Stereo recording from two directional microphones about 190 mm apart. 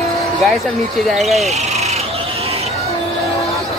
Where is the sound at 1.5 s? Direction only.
35° right (ahead or behind).